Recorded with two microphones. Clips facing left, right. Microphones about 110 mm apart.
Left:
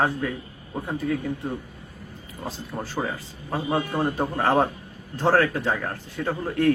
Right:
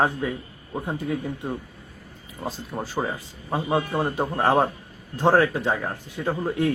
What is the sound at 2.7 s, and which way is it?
A man's voice, 15° right (ahead or behind).